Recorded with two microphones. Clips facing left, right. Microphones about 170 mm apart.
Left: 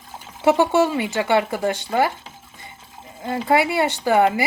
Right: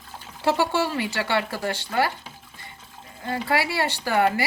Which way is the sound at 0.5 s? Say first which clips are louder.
Left 6 dB; 20° left (ahead or behind).